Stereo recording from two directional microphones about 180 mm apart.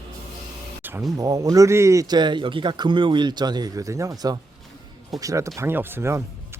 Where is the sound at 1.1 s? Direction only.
20° right (ahead or behind).